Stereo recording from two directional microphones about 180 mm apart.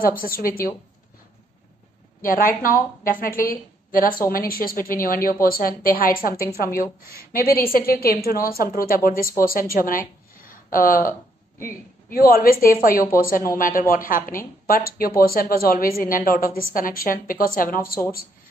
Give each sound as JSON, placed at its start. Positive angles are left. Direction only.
{"t": 0.0, "sound": "a woman's voice", "side_deg": 55}
{"t": 2.2, "sound": "a woman's voice", "side_deg": 50}